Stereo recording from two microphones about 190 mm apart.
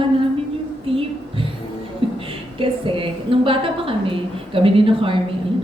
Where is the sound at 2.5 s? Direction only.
30° right (ahead or behind).